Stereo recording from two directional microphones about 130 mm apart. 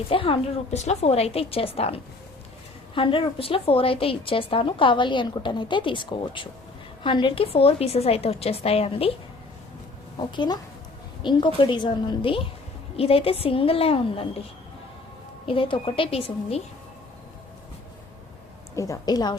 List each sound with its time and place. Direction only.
0.1 s a woman's voice: 45° left (ahead or behind)
10.2 s a woman's voice: 35° left (ahead or behind)
15.4 s a woman's voice: 40° left (ahead or behind)
18.8 s a woman's voice: 25° left (ahead or behind)